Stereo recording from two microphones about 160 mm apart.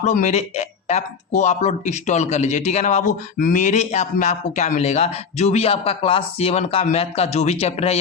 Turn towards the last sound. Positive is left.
turn(degrees=40)  # may be behind; listen again after turning